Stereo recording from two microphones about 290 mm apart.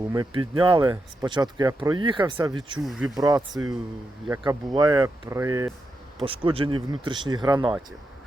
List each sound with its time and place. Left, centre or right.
0.1 s speech: centre
2.7 s speech: centre
3.2 s speech: centre